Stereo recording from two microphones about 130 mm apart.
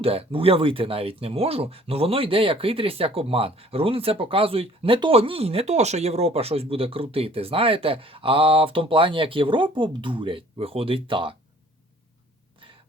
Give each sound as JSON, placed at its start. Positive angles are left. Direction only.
{"t": 0.0, "sound": "speech", "side_deg": -50}